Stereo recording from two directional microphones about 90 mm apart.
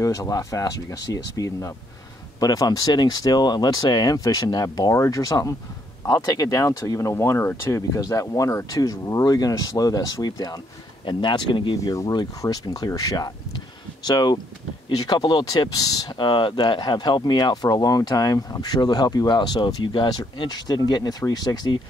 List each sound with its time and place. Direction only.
0.0 s speech: 40° left (ahead or behind)
11.1 s speech: 60° left (ahead or behind)
11.8 s speech: 40° left (ahead or behind)
16.2 s speech: 60° left (ahead or behind)